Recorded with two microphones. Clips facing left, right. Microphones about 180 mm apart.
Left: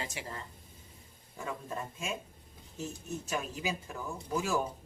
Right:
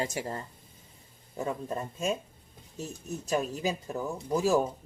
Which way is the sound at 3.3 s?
40° right (ahead or behind).